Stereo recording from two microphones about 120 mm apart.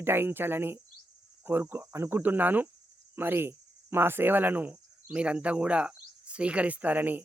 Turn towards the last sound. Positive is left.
turn(degrees=-15)  # may be behind; listen again after turning